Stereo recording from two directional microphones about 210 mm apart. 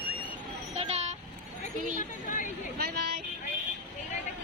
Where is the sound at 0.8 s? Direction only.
30° right (ahead or behind).